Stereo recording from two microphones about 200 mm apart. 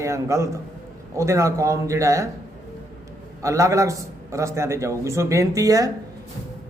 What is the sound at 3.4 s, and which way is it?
Speech, 15° right (ahead or behind).